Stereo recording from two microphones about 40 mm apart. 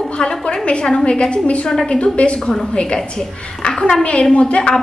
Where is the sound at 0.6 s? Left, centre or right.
Left.